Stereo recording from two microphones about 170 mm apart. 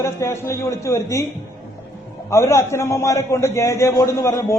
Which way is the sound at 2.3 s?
15° left (ahead or behind).